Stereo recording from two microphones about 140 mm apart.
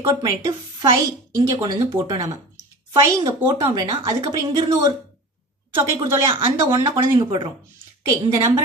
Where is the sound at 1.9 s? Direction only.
25° right (ahead or behind).